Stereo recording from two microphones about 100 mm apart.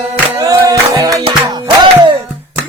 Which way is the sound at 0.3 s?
35° right (ahead or behind).